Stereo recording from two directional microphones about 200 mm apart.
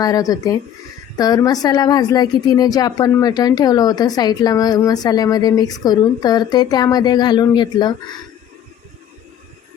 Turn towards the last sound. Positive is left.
turn(degrees=20)  # may be behind; listen again after turning